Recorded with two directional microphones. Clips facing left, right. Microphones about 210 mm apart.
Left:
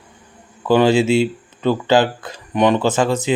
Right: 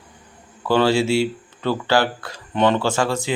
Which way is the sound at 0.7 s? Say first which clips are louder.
Left 4 dB; 15° left (ahead or behind).